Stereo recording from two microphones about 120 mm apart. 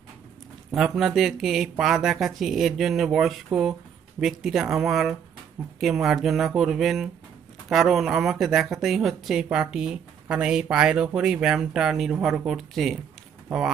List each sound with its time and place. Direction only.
0.7 s speech: centre (ahead or behind)